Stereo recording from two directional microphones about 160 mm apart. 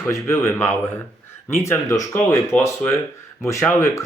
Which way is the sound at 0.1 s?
15° left (ahead or behind).